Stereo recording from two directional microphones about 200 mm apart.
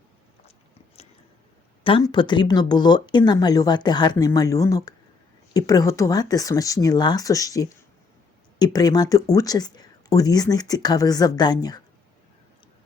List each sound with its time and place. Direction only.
1.8 s speech: 20° left (ahead or behind)